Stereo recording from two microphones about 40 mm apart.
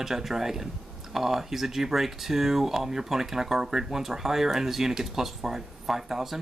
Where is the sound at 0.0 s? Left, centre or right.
Centre.